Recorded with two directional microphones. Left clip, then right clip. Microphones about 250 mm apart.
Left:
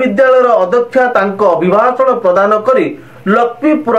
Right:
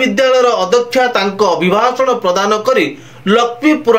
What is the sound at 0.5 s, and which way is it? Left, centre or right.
Speech, right.